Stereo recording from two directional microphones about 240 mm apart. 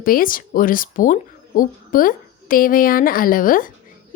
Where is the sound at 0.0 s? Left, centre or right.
Left.